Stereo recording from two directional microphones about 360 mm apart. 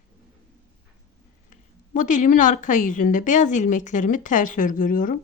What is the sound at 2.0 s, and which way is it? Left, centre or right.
A woman's voice, left.